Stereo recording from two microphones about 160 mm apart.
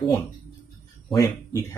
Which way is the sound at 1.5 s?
20° left (ahead or behind).